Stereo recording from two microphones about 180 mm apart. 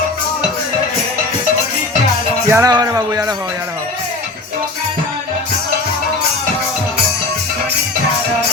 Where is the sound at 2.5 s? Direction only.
20° right (ahead or behind).